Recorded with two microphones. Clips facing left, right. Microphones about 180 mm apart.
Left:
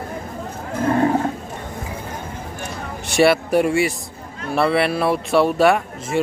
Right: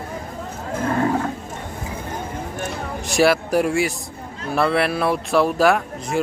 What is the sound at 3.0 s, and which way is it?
Speech, centre (ahead or behind).